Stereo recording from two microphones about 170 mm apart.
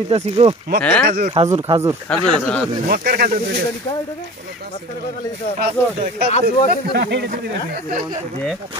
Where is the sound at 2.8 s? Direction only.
60° right (ahead or behind).